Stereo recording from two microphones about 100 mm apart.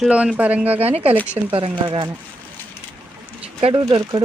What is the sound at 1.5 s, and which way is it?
Speech, 55° right (ahead or behind).